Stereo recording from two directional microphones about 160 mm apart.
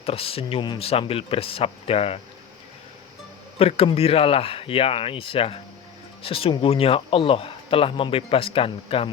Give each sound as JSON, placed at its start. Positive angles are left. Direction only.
{"t": 0.0, "sound": "speech", "side_deg": 35}
{"t": 3.6, "sound": "speech", "side_deg": 40}